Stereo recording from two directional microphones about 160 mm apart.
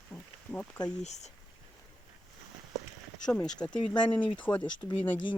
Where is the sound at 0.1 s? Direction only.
10° left (ahead or behind).